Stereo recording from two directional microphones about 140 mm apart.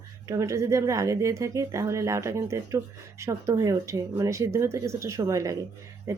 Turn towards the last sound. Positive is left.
turn(degrees=-25)  # may be behind; listen again after turning